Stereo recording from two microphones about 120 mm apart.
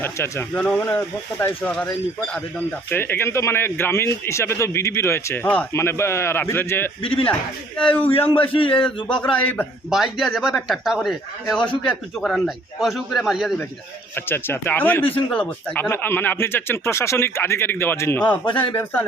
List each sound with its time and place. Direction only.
0.0 s a man's voice: 20° left (ahead or behind)
1.7 s speech: 5° left (ahead or behind)
2.9 s a man's voice: 20° left (ahead or behind)
7.0 s speech: 45° left (ahead or behind)
7.8 s speech: 10° left (ahead or behind)
8.5 s speech: 45° left (ahead or behind)
9.0 s speech: 10° left (ahead or behind)
9.9 s a man's voice: centre (ahead or behind)
14.2 s a man's voice: 20° left (ahead or behind)